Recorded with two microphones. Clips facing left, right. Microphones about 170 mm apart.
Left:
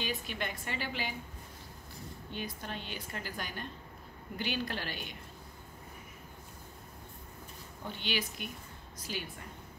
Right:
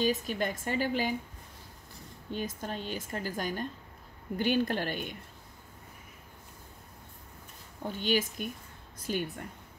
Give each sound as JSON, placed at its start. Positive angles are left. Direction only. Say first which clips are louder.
{"t": 0.0, "sound": "a woman's voice", "louder": "right 8 dB", "side_deg": -40}
{"t": 2.3, "sound": "a woman's voice", "louder": "right 5 dB", "side_deg": -40}
{"t": 7.8, "sound": "a woman's voice", "louder": "right 7 dB", "side_deg": -45}